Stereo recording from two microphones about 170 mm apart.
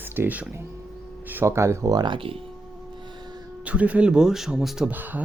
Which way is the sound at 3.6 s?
10° right (ahead or behind).